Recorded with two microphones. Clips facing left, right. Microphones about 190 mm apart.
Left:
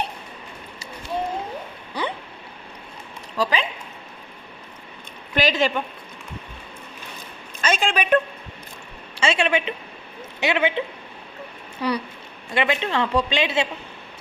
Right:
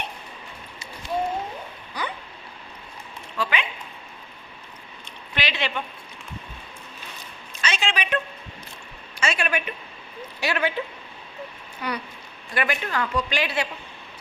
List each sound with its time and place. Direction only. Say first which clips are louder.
2.0 s a sound: left 4 dB; 30° left (ahead or behind)
3.3 s speech: left 4 dB; 35° left (ahead or behind)
5.3 s a sound: left 8 dB; 45° left (ahead or behind)
7.6 s a woman's voice: left 5 dB; 50° left (ahead or behind)
9.2 s speech: left 5 dB; 25° left (ahead or behind)
11.8 s speech: left 6 dB; 35° left (ahead or behind)